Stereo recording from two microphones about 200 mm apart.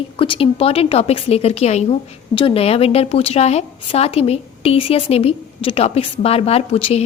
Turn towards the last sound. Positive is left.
turn(degrees=30)  # may be behind; listen again after turning